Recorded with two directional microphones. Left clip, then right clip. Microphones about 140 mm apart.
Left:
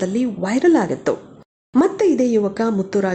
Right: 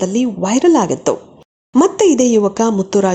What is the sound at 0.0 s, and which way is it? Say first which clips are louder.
A woman's voice: right 4 dB; 15° right (ahead or behind).